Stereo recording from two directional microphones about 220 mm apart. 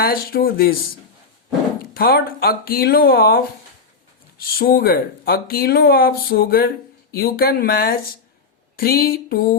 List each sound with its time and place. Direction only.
0.0 s speech: 40° left (ahead or behind)
1.8 s speech: 45° left (ahead or behind)
4.4 s speech: 40° left (ahead or behind)